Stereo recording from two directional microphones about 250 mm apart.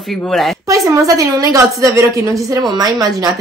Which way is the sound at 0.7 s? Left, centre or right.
Centre.